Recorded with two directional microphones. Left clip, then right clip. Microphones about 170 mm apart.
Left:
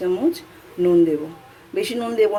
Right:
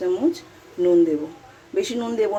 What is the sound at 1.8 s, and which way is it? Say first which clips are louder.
Speech: left 3 dB; 10° left (ahead or behind).